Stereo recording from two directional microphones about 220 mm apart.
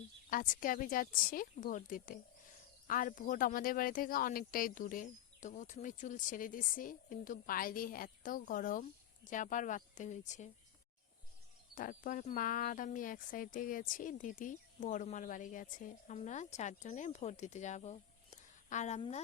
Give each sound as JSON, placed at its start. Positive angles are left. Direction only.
{"t": 0.3, "sound": "speech", "side_deg": 40}
{"t": 11.7, "sound": "speech", "side_deg": 35}